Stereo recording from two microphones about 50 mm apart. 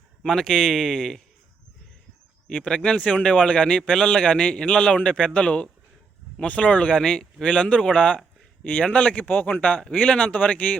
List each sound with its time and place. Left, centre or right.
0.2 s speech: centre
2.6 s a man's voice: centre
6.9 s a man's voice: centre
9.1 s a man's voice: left